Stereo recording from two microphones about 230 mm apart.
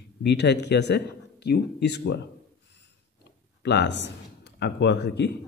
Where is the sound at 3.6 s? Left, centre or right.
Left.